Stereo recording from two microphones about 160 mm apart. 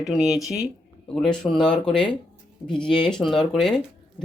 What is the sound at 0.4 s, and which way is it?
Speech, 20° left (ahead or behind).